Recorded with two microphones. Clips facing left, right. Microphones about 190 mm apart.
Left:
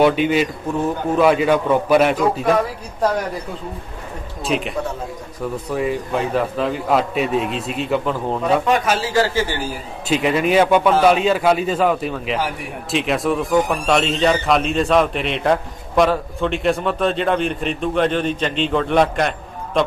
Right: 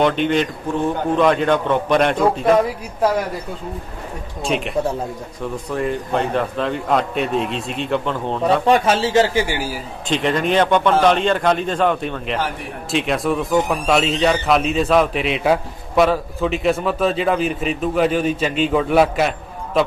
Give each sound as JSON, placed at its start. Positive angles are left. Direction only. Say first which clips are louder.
{"t": 0.0, "sound": "a man's voice", "louder": "left 2 dB", "side_deg": 5}
{"t": 4.5, "sound": "a man's voice", "louder": "right 2 dB", "side_deg": 0}
{"t": 8.6, "sound": "a man's voice", "louder": "right 3 dB", "side_deg": -30}
{"t": 10.0, "sound": "a man's voice", "louder": "left 1 dB", "side_deg": 5}